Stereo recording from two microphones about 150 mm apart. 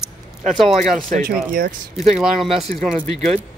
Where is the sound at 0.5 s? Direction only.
Centre (ahead or behind).